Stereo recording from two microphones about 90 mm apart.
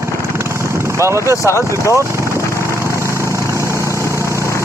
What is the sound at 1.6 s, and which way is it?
Speech, 30° right (ahead or behind).